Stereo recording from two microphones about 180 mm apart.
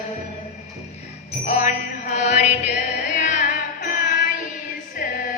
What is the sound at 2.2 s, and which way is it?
Chant, 40° left (ahead or behind).